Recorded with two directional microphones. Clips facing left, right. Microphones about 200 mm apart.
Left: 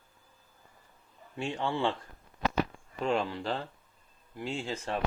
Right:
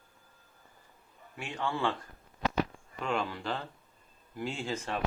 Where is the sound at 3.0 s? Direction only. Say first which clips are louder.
Left 3 dB; 30° left (ahead or behind).